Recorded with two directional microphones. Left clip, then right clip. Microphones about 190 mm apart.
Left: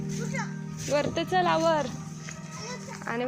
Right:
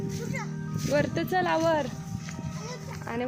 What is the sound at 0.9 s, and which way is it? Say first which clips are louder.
Speech: left 1 dB; 25° right (ahead or behind).